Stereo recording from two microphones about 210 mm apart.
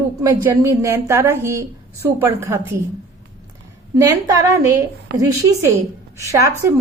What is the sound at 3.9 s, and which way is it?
A woman's voice, 15° right (ahead or behind).